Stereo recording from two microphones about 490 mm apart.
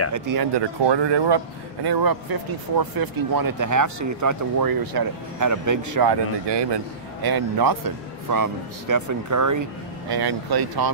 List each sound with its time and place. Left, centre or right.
0.1 s speech: right
0.8 s speech: right
6.0 s speech: right